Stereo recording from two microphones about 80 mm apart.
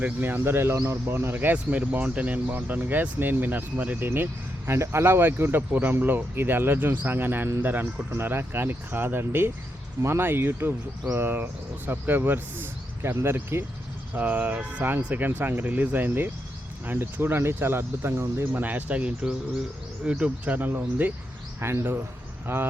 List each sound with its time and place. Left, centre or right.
0.0 s speech: right
18.6 s speech: right